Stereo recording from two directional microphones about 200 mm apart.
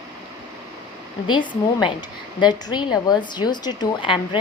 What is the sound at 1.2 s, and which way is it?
A woman's voice, 25° left (ahead or behind).